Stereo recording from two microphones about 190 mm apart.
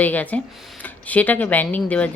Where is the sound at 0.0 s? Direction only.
10° left (ahead or behind).